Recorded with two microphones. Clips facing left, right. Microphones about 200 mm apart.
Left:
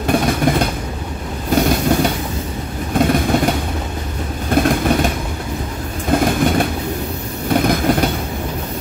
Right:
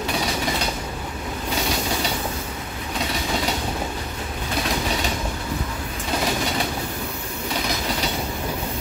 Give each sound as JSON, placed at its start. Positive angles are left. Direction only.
{"t": 0.0, "sound": "train", "side_deg": 55}
{"t": 6.0, "sound": "vehicle", "side_deg": 50}
{"t": 7.4, "sound": "train", "side_deg": 55}